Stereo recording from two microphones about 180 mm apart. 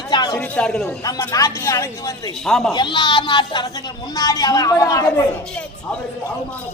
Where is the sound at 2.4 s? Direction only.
Centre (ahead or behind).